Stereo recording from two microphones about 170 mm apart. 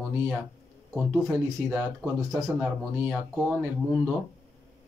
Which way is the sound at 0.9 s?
5° right (ahead or behind).